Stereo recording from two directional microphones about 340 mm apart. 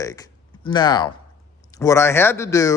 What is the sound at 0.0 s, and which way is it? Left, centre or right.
A man's voice, centre.